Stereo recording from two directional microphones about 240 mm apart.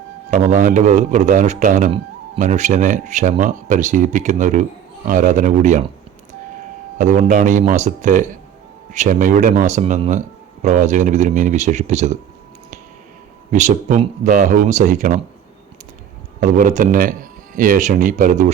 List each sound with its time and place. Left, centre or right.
0.3 s a man's voice: right
7.0 s a man's voice: right
13.5 s a man's voice: right
16.4 s a man's voice: right